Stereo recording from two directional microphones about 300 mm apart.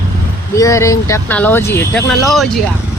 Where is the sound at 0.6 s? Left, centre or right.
Centre.